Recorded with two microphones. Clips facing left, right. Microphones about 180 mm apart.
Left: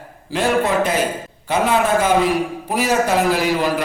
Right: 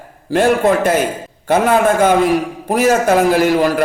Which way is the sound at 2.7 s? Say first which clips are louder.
Right 6 dB; 45° right (ahead or behind).